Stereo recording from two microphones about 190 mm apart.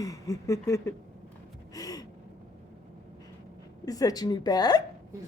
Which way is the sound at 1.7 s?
20° left (ahead or behind).